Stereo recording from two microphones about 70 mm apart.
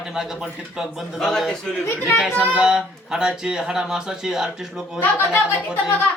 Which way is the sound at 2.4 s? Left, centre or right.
Right.